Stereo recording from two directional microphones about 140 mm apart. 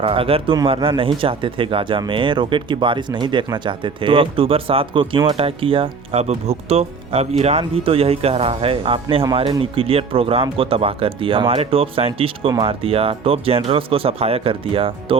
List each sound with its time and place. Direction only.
0.0 s speech: 40° right (ahead or behind)